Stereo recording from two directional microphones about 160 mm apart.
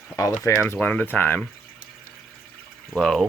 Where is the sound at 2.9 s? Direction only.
Centre (ahead or behind).